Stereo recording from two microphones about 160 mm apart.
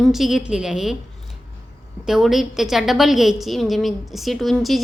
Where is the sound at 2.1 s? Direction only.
Centre (ahead or behind).